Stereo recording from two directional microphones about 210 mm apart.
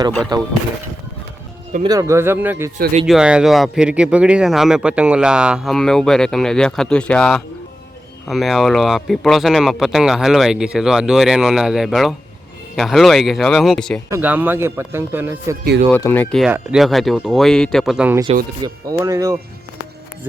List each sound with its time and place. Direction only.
0.3 s speech: 20° right (ahead or behind)
1.8 s a man's voice: 15° right (ahead or behind); by 14.0 s 5° left (ahead or behind)
14.1 s a man's voice: 10° right (ahead or behind)
15.9 s speech: 10° left (ahead or behind)
18.6 s a man's voice: 15° right (ahead or behind)